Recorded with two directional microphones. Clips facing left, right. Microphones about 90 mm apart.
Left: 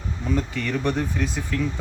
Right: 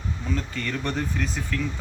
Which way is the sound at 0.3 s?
15° left (ahead or behind).